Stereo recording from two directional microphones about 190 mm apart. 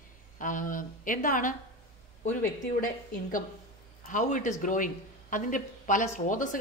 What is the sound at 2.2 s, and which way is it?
A woman's voice, 40° left (ahead or behind).